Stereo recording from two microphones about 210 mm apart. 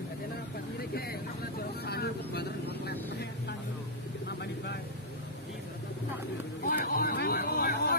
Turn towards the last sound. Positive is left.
turn(degrees=45)  # may be behind; listen again after turning